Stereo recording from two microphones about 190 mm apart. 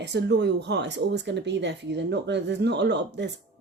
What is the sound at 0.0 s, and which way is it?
Speech, 65° right (ahead or behind).